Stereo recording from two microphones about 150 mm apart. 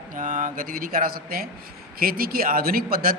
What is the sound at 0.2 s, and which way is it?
A man's voice, 60° right (ahead or behind).